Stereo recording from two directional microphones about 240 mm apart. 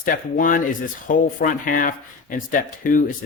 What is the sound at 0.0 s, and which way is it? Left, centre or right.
Speech, left.